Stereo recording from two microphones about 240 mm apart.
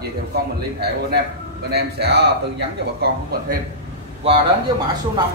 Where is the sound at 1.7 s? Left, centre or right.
Right.